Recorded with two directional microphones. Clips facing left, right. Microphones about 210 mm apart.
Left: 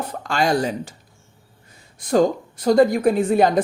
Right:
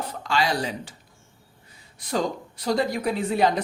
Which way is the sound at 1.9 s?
50° left (ahead or behind).